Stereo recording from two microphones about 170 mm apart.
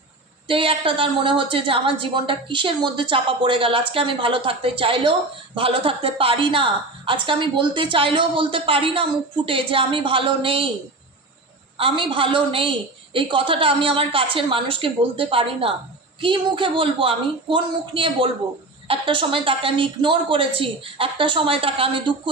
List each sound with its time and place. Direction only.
0.4 s a woman's voice: 30° right (ahead or behind)
11.8 s a woman's voice: 30° right (ahead or behind)